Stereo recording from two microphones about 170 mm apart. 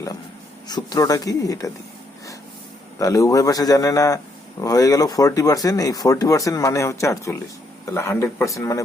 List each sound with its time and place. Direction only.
0.7 s speech: 20° left (ahead or behind)
3.0 s speech: 20° left (ahead or behind)